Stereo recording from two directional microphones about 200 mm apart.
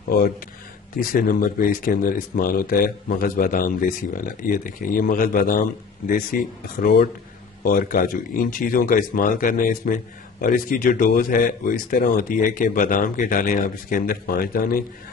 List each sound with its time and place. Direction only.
0.9 s speech: 45° left (ahead or behind)
7.6 s speech: 45° left (ahead or behind)